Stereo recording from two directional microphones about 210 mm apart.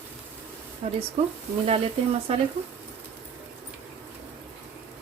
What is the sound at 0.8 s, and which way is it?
Speech, 35° right (ahead or behind).